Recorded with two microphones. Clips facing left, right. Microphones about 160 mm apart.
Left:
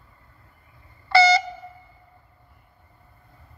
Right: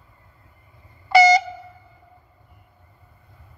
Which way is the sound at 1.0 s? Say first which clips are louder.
Right 3 dB; 15° right (ahead or behind).